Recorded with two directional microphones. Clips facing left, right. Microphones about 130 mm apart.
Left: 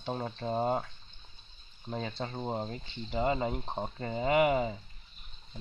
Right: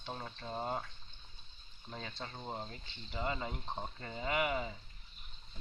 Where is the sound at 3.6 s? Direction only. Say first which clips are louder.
Left 6 dB; 45° left (ahead or behind).